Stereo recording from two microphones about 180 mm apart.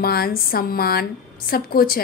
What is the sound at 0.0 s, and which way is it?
A woman's voice, 55° left (ahead or behind).